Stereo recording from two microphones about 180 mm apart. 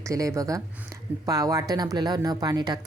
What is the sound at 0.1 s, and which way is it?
Speech, 20° right (ahead or behind).